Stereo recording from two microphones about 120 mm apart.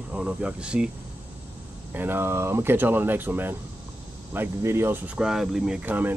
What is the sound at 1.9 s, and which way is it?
Speech, 15° right (ahead or behind).